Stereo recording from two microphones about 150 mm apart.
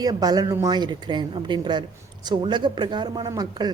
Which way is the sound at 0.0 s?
25° right (ahead or behind).